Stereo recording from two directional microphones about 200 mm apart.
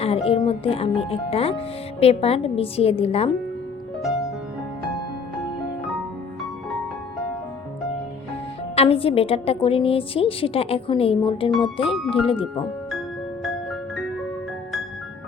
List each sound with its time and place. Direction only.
0.0 s speech: 30° left (ahead or behind)
8.7 s speech: 30° left (ahead or behind)